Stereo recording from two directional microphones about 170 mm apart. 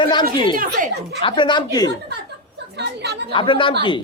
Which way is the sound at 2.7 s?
80° right.